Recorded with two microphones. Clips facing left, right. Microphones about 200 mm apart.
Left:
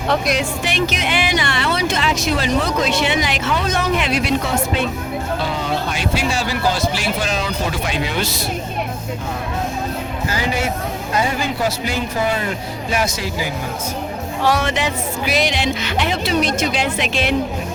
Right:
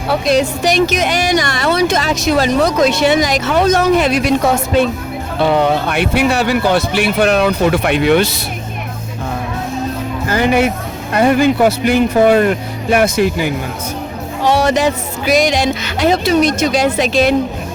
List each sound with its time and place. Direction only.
0.3 s speech: 40° right (ahead or behind)
5.4 s speech: 65° right (ahead or behind)
10.2 s speech: 60° right (ahead or behind)
14.6 s speech: 40° right (ahead or behind)